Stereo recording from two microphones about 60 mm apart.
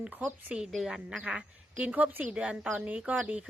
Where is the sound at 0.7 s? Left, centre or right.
Centre.